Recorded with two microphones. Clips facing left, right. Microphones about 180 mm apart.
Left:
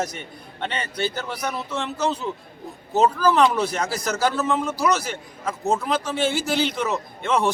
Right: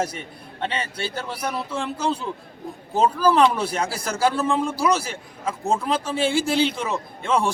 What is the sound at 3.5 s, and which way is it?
A man's voice, 30° right (ahead or behind).